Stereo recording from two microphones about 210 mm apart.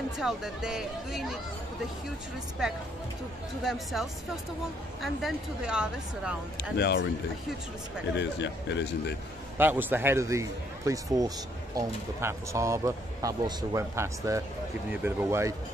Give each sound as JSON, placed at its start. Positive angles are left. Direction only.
{"t": 0.2, "sound": "a woman's voice", "side_deg": -5}
{"t": 3.6, "sound": "a woman's voice", "side_deg": 0}
{"t": 6.8, "sound": "speech", "side_deg": 55}
{"t": 8.2, "sound": "a man's voice", "side_deg": 55}
{"t": 9.6, "sound": "a man's voice", "side_deg": -10}